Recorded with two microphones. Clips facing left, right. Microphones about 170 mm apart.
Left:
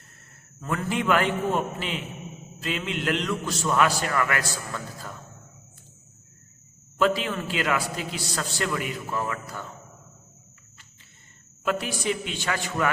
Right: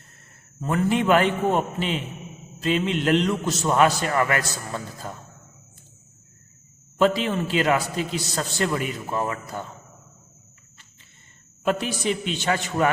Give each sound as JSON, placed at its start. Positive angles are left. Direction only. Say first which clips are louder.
{"t": 0.6, "sound": "a man's voice", "louder": "right 5 dB", "side_deg": -25}
{"t": 7.0, "sound": "a man's voice", "louder": "right 3 dB", "side_deg": -25}
{"t": 11.6, "sound": "a man's voice", "louder": "right 3 dB", "side_deg": -25}